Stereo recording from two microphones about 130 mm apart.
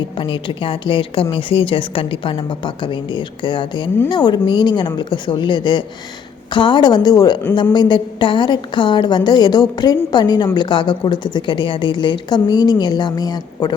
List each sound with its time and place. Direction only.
0.2 s a woman's voice: 40° left (ahead or behind)